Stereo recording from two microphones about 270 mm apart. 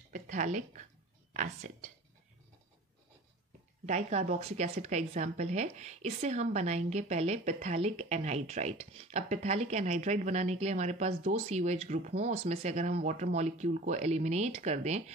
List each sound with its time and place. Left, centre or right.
0.1 s speech: right
3.8 s speech: right